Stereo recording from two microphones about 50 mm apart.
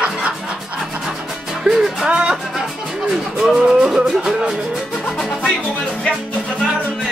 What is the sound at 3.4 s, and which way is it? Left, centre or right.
Music, centre.